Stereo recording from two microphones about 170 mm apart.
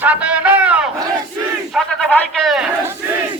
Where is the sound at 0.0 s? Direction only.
10° right (ahead or behind).